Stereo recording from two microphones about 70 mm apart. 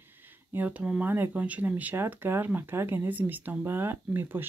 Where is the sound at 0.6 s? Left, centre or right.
Right.